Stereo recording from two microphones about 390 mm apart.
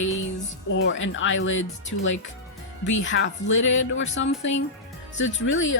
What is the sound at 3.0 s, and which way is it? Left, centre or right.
Speech, left.